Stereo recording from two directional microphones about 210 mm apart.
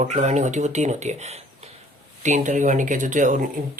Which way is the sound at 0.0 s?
35° right (ahead or behind).